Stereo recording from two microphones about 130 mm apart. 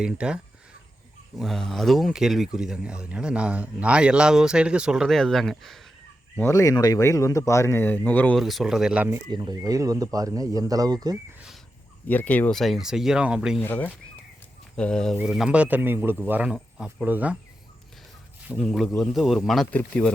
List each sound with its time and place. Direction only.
0.0 s speech: 10° right (ahead or behind)
6.3 s speech: 20° left (ahead or behind)
8.4 s speech: centre (ahead or behind)
9.3 s speech: 35° right (ahead or behind)
12.0 s speech: 15° left (ahead or behind); by 13.6 s 5° right (ahead or behind)
13.6 s speech: 15° left (ahead or behind); by 17.3 s 10° right (ahead or behind)
18.6 s speech: centre (ahead or behind)